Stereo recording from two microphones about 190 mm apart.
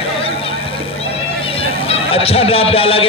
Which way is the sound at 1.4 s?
30° left (ahead or behind).